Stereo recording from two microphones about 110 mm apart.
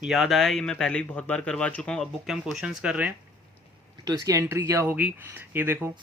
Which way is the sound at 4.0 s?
35° right (ahead or behind).